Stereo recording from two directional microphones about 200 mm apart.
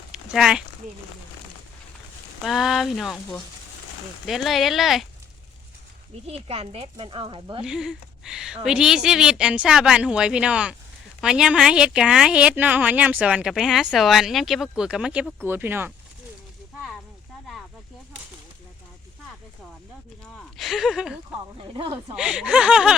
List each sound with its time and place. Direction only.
0.1 s a sound: 5° right (ahead or behind)
2.4 s a woman's voice: centre (ahead or behind)
4.3 s a woman's voice: centre (ahead or behind)
6.2 s speech: 30° right (ahead or behind)
7.6 s a woman's voice: 5° right (ahead or behind)
20.3 s a woman's voice: centre (ahead or behind)
21.6 s speech: 25° right (ahead or behind)
22.1 s a woman's voice: 5° right (ahead or behind)